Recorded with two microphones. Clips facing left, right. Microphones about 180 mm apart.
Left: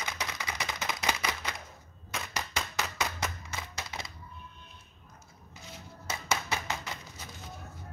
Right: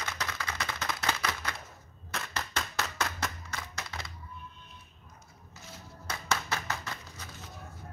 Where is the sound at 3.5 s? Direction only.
20° left (ahead or behind).